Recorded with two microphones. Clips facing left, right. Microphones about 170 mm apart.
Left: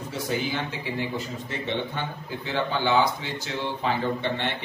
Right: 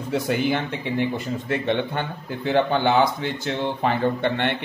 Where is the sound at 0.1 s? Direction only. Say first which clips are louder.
Right 7 dB; 60° right (ahead or behind).